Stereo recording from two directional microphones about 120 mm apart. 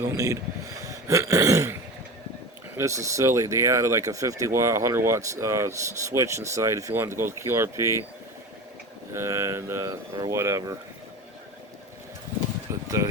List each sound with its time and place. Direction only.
0.0 s speech: 25° right (ahead or behind)
0.9 s throat clearing: 25° right (ahead or behind)
2.7 s speech: 25° right (ahead or behind)
9.1 s speech: 25° right (ahead or behind)
12.7 s a sound: 25° right (ahead or behind)